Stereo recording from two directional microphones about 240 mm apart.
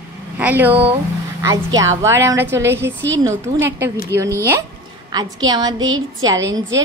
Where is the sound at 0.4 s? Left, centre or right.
Centre.